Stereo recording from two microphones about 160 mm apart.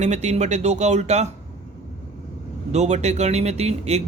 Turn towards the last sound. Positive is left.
turn(degrees=-40)  # may be behind; listen again after turning